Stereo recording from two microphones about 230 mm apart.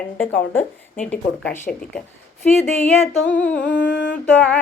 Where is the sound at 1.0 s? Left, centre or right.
Centre.